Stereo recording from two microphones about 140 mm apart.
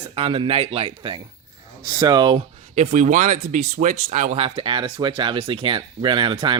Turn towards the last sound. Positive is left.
turn(degrees=-35)  # may be behind; listen again after turning